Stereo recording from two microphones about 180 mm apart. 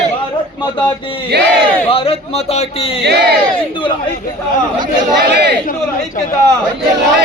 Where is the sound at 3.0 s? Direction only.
65° right (ahead or behind).